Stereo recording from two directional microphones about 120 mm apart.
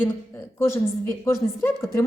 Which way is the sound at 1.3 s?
25° left (ahead or behind).